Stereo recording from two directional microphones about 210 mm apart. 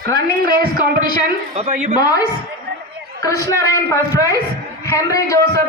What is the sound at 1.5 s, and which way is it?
Speech, 30° right (ahead or behind).